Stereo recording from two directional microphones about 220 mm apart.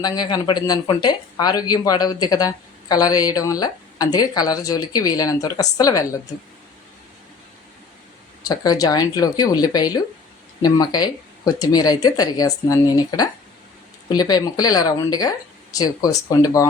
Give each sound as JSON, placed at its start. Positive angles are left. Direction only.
{"t": 0.0, "sound": "speech", "side_deg": 20}
{"t": 8.4, "sound": "speech", "side_deg": 15}